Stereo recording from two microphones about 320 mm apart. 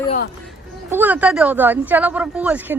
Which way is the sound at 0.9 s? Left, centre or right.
Centre.